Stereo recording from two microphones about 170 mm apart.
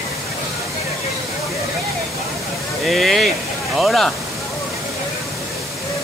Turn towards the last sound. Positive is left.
turn(degrees=0)  # may be behind; listen again after turning